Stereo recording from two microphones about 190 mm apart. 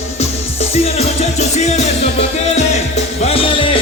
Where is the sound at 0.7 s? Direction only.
35° left (ahead or behind).